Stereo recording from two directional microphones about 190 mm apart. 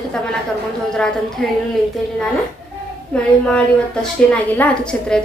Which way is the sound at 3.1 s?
5° left (ahead or behind).